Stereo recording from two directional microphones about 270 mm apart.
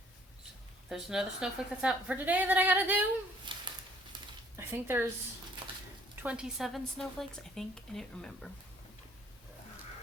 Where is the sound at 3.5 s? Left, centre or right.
Centre.